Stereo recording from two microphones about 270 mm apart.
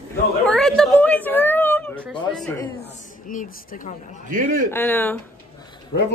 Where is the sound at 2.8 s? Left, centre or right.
Left.